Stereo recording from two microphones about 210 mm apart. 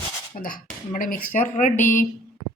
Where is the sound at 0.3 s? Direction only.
40° left (ahead or behind).